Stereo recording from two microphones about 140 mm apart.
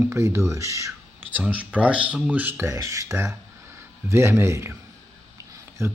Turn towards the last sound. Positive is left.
turn(degrees=-20)  # may be behind; listen again after turning